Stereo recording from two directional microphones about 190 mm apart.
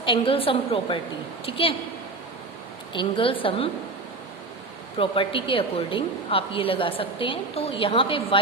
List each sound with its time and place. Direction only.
0.0 s a woman's voice: 25° left (ahead or behind)
2.9 s a woman's voice: 25° left (ahead or behind)
4.9 s a woman's voice: 30° left (ahead or behind)